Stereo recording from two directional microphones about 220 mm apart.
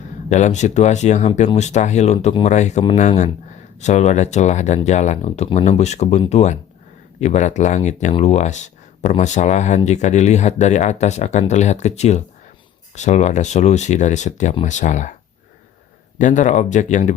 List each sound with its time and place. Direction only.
0.3 s speech: 30° left (ahead or behind)
16.1 s speech: 35° left (ahead or behind)